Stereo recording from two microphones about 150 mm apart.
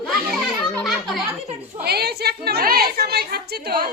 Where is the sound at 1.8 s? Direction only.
90° right.